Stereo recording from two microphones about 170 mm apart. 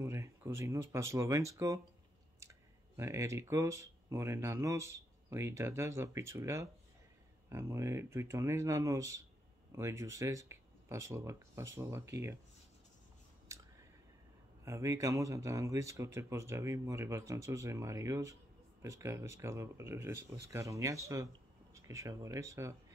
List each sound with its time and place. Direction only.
0.0 s speech: 15° right (ahead or behind)
3.0 s speech: 20° right (ahead or behind)
14.6 s speech: 15° right (ahead or behind)